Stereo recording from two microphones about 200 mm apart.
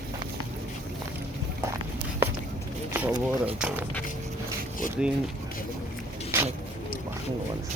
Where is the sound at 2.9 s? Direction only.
5° right (ahead or behind).